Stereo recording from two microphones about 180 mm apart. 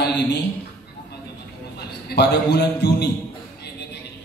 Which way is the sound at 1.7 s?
65° left (ahead or behind).